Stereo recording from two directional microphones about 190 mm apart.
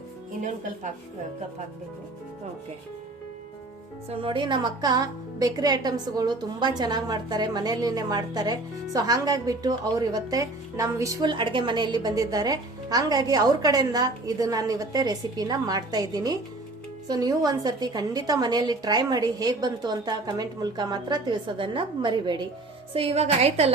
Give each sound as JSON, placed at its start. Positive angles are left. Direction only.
{"t": 4.1, "sound": "a woman's voice", "side_deg": -25}